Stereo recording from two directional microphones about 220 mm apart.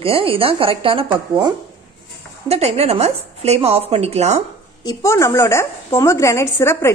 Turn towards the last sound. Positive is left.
turn(degrees=10)  # may be behind; listen again after turning